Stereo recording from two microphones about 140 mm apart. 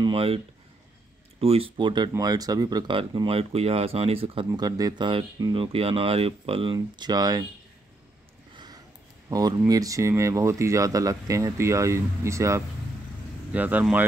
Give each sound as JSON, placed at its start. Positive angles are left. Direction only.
{"t": 0.0, "sound": "speech", "side_deg": -40}
{"t": 1.4, "sound": "speech", "side_deg": -45}
{"t": 4.5, "sound": "speech", "side_deg": -25}
{"t": 9.3, "sound": "speech", "side_deg": -25}